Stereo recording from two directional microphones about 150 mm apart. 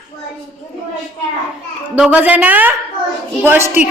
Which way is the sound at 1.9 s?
10° right (ahead or behind).